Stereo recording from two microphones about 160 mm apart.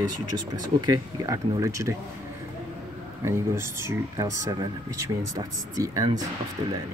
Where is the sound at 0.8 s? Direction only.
25° right (ahead or behind).